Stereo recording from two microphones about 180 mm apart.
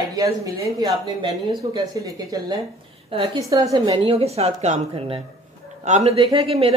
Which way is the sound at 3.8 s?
30° right (ahead or behind).